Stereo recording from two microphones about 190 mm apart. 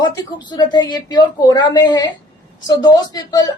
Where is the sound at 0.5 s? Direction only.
20° left (ahead or behind).